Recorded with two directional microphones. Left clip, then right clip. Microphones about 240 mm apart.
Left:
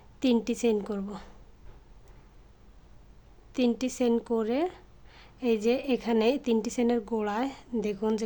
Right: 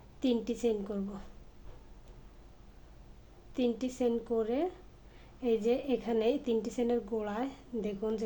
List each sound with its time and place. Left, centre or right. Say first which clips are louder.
0.2 s speech: left 5 dB; left
3.5 s speech: left 5 dB; left